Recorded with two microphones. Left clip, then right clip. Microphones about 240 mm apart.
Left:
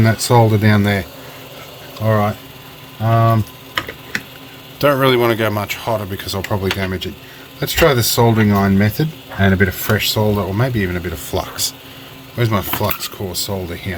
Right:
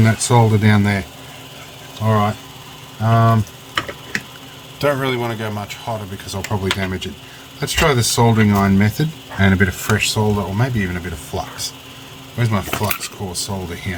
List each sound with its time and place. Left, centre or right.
0.0 s speech: left
2.0 s speech: left
4.8 s speech: left
11.3 s speech: left
12.4 s speech: left